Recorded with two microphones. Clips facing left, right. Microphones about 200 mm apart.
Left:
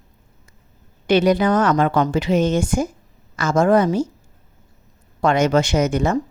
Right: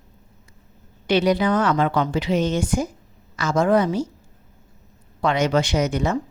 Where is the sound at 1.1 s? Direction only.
50° left (ahead or behind).